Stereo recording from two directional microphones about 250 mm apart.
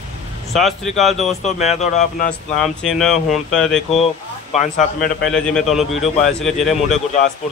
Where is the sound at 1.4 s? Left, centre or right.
Left.